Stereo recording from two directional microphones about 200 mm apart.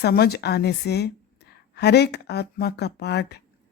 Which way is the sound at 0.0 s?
50° left (ahead or behind).